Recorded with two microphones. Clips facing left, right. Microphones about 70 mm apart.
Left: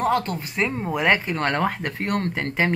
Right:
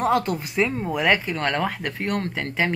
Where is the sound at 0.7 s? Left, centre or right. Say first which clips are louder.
Left 3 dB; centre.